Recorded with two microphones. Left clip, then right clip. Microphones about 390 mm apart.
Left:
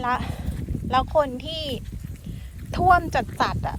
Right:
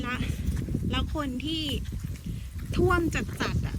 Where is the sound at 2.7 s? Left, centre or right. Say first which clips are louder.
Left 8 dB; centre.